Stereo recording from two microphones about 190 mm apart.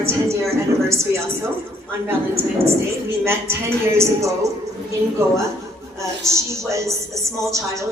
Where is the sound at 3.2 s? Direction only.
15° right (ahead or behind).